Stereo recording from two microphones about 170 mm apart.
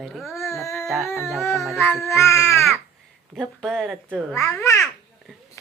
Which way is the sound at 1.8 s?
15° left (ahead or behind).